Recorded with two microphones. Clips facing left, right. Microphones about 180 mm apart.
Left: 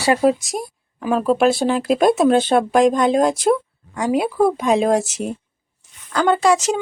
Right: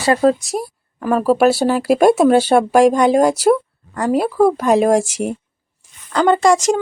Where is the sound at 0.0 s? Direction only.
15° left (ahead or behind).